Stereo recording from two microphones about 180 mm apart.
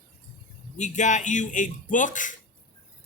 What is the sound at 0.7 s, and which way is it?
A man's voice, 40° left (ahead or behind).